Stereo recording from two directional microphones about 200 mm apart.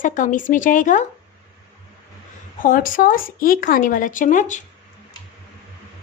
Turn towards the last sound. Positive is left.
turn(degrees=40)  # may be behind; listen again after turning